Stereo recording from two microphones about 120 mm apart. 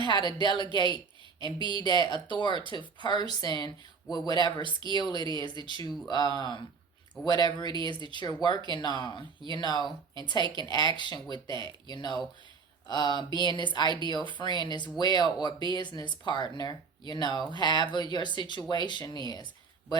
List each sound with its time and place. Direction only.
0.0 s speech: 40° left (ahead or behind)
4.6 s speech: 40° right (ahead or behind)
4.9 s speech: 35° left (ahead or behind)
5.2 s speech: 40° right (ahead or behind)
6.1 s speech: 35° left (ahead or behind)
10.4 s speech: 40° right (ahead or behind)
10.7 s speech: 35° left (ahead or behind)